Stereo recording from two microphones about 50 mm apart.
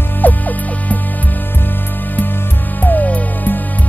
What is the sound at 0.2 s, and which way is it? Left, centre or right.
Music, left.